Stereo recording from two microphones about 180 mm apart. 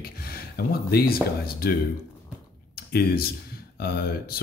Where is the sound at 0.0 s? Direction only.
55° left (ahead or behind).